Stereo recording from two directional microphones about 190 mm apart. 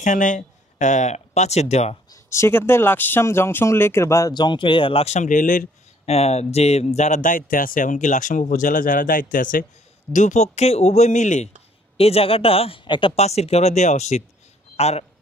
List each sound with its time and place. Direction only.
0.0 s speech: 45° left (ahead or behind)
2.0 s a man's voice: 15° left (ahead or behind); by 15.0 s 35° left (ahead or behind)